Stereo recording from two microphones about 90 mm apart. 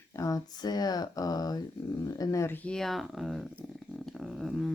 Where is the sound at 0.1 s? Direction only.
40° left (ahead or behind).